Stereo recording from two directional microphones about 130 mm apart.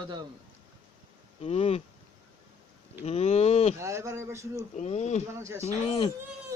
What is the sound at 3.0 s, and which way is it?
Speech, 55° left (ahead or behind).